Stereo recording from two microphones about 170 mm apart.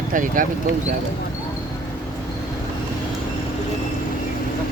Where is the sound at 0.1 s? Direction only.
50° right (ahead or behind).